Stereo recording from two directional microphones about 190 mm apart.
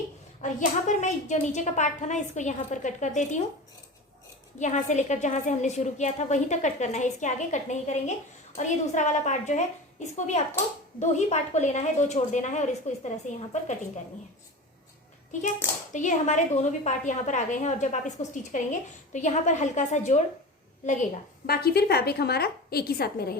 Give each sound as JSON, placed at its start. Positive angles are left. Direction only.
{"t": 0.4, "sound": "a woman's voice", "side_deg": 40}
{"t": 4.6, "sound": "a woman's voice", "side_deg": 40}
{"t": 15.3, "sound": "a woman's voice", "side_deg": 40}
{"t": 21.4, "sound": "a woman's voice", "side_deg": 55}